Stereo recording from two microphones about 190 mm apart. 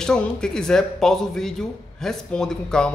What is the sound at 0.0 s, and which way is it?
A man's voice, 5° left (ahead or behind).